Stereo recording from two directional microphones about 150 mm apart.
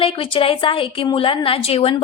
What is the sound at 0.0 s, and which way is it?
A woman's voice, 35° left (ahead or behind).